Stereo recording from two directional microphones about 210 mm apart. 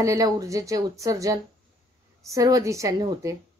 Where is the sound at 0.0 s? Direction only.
15° right (ahead or behind).